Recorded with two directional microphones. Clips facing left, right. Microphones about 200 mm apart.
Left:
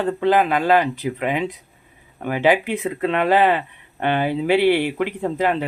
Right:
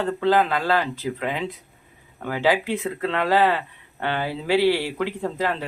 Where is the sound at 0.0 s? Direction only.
15° left (ahead or behind).